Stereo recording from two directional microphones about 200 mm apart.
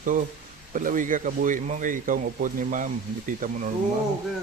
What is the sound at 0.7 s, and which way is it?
Speech, 40° right (ahead or behind).